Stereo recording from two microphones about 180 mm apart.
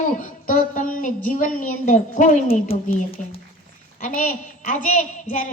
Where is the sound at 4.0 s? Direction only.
45° left (ahead or behind).